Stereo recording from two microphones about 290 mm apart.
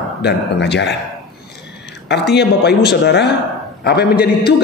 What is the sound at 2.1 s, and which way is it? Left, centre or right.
Speech, left.